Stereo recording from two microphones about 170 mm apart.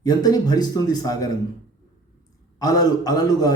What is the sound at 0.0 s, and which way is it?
A man's voice, 20° left (ahead or behind).